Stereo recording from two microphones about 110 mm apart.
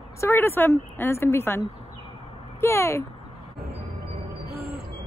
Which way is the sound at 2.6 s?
25° left (ahead or behind).